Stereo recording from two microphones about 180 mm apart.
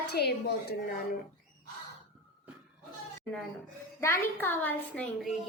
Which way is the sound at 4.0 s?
15° left (ahead or behind).